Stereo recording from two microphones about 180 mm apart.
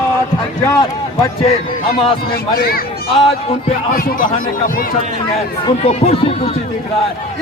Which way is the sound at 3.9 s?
50° left (ahead or behind).